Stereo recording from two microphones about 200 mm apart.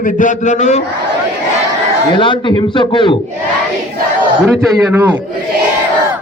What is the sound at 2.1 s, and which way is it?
A man's voice, 25° left (ahead or behind).